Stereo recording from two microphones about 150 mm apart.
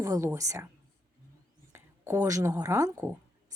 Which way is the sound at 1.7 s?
15° right (ahead or behind).